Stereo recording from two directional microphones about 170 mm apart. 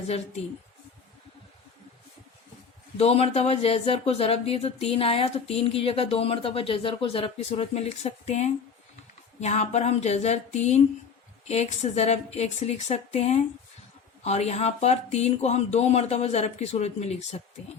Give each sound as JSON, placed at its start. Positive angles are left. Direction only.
{"t": 3.0, "sound": "speech", "side_deg": 35}